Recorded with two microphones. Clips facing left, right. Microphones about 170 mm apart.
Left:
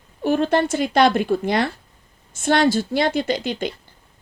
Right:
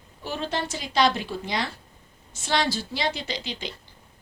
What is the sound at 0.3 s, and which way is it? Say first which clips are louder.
Speech: left 11 dB; 55° left (ahead or behind).